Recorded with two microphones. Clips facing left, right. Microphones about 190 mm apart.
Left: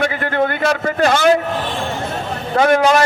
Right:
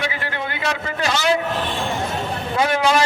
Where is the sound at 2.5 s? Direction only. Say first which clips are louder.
Left 6 dB; 50° left (ahead or behind).